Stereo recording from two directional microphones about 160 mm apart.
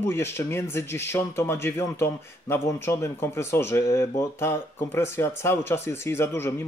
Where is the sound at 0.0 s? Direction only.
15° left (ahead or behind).